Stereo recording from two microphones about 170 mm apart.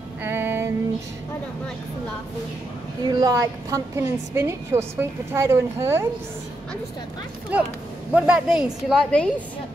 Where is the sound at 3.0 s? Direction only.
25° right (ahead or behind).